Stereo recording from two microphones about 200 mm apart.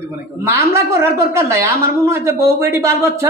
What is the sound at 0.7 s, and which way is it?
A woman's voice, 15° right (ahead or behind).